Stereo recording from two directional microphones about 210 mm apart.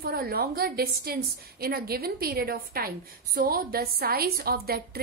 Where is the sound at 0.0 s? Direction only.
45° right (ahead or behind).